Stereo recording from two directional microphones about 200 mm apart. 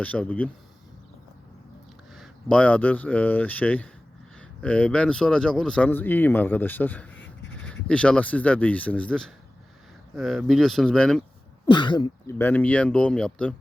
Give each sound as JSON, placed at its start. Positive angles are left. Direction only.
{"t": 0.0, "sound": "speech", "side_deg": 5}
{"t": 2.1, "sound": "speech", "side_deg": 5}
{"t": 11.6, "sound": "speech", "side_deg": 25}
{"t": 12.4, "sound": "speech", "side_deg": 10}